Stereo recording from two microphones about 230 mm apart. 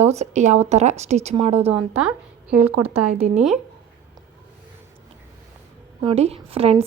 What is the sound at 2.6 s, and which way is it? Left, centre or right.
Speech, right.